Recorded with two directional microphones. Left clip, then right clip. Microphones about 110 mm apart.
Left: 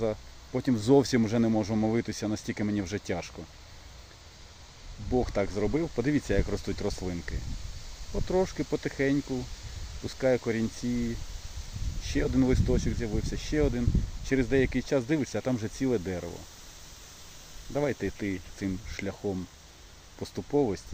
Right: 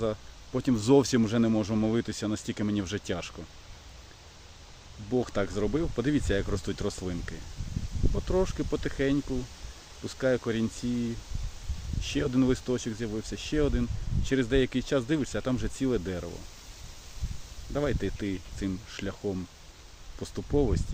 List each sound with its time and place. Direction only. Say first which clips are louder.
0.5 s speech: even; 15° right (ahead or behind)
5.1 s speech: left 1 dB; 10° right (ahead or behind)
12.0 s speech: even; 10° right (ahead or behind)
17.7 s speech: left 1 dB; 5° right (ahead or behind)